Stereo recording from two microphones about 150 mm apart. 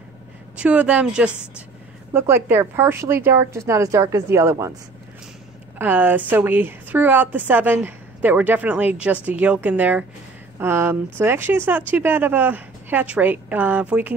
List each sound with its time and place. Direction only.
0.6 s speech: 10° right (ahead or behind)
5.8 s speech: 10° right (ahead or behind)